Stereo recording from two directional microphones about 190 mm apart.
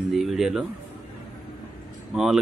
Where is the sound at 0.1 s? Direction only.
Centre (ahead or behind).